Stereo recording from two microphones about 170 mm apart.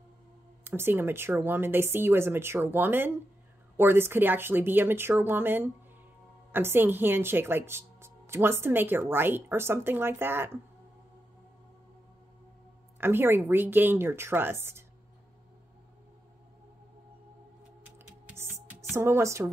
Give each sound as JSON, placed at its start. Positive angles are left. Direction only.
{"t": 0.7, "sound": "speech", "side_deg": -15}
{"t": 13.0, "sound": "speech", "side_deg": -15}
{"t": 17.9, "sound": "music", "side_deg": -15}
{"t": 18.9, "sound": "speech", "side_deg": -15}